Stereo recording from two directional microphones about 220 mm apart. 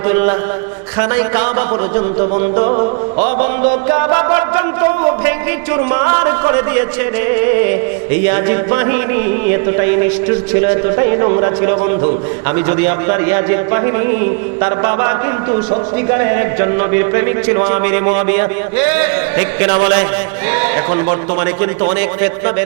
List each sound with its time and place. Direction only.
0.1 s a man's voice: 20° right (ahead or behind); by 3.7 s 35° right (ahead or behind)
3.8 s a man's voice: 20° right (ahead or behind)
8.3 s a man's voice: 15° right (ahead or behind)
10.7 s a man's voice: 25° right (ahead or behind)